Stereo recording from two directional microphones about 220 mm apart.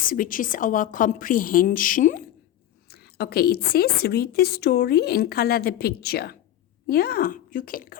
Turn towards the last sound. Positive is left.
turn(degrees=40)  # may be behind; listen again after turning